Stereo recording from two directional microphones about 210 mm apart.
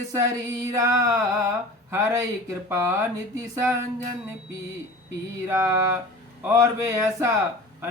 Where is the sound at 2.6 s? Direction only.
10° right (ahead or behind).